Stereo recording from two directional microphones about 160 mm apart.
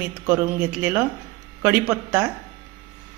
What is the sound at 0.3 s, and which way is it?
Speech, 10° right (ahead or behind).